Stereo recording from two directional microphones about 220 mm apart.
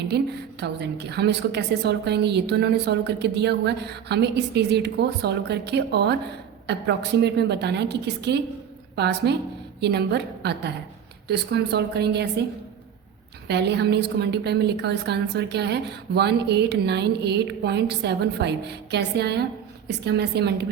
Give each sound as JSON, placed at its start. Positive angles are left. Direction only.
{"t": 0.1, "sound": "a woman's voice", "side_deg": -50}
{"t": 13.5, "sound": "a woman's voice", "side_deg": -50}